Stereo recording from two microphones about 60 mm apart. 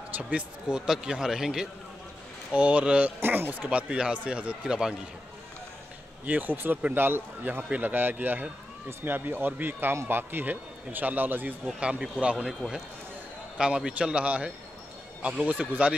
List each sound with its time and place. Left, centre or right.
0.3 s speech: centre
2.5 s speech: right
3.2 s speech: right; by 4.9 s centre
6.2 s speech: right
12.0 s speech: centre
13.6 s speech: centre